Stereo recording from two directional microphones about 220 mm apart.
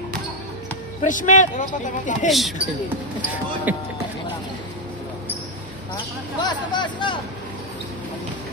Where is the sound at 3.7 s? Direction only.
5° right (ahead or behind).